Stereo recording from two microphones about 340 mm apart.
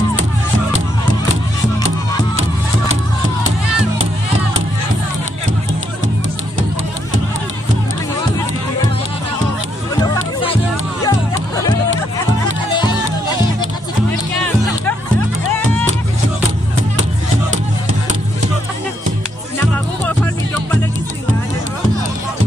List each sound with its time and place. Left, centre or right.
10.1 s music: centre